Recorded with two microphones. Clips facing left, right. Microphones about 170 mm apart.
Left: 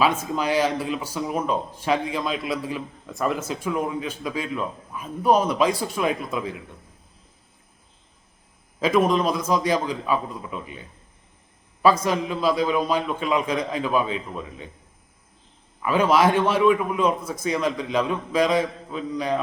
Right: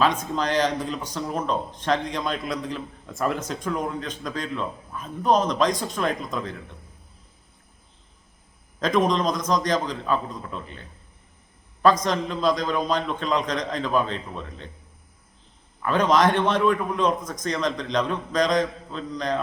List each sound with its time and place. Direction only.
0.0 s speech: 5° left (ahead or behind)
8.8 s speech: 5° left (ahead or behind)
15.8 s speech: 5° left (ahead or behind)